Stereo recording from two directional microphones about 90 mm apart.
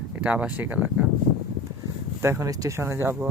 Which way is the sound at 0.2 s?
15° right (ahead or behind).